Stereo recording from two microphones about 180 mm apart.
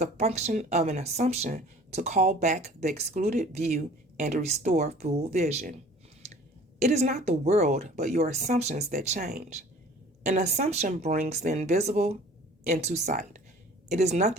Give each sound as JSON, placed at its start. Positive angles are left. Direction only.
{"t": 0.0, "sound": "speech", "side_deg": -35}
{"t": 6.7, "sound": "speech", "side_deg": -40}